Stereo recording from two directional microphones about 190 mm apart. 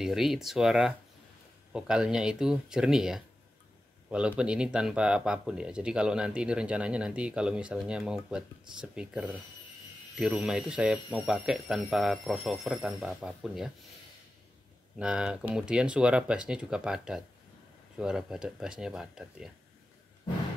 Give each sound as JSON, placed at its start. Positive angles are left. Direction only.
{"t": 0.0, "sound": "speech", "side_deg": 0}
{"t": 15.0, "sound": "speech", "side_deg": -5}